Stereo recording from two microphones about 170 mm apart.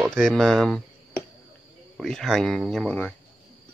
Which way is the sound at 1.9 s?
Centre (ahead or behind).